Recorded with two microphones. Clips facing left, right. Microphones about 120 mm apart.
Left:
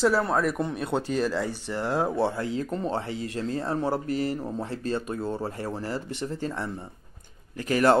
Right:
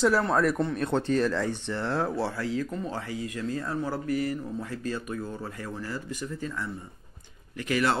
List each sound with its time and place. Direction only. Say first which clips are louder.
0.2 s speech: right 1 dB; 5° left (ahead or behind); by 8.0 s 40° left (ahead or behind)